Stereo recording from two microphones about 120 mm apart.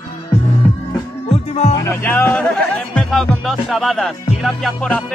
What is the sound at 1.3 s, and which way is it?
Music, 65° left (ahead or behind).